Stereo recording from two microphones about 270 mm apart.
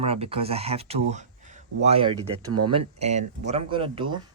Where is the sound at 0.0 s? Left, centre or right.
Right.